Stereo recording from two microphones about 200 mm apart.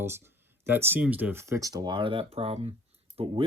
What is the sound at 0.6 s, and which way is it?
Speech, 10° right (ahead or behind).